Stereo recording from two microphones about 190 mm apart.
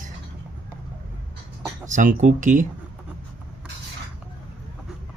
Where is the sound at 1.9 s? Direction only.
40° right (ahead or behind).